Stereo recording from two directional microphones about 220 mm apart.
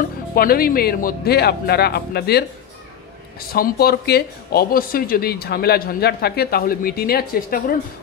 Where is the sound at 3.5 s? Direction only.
45° left (ahead or behind).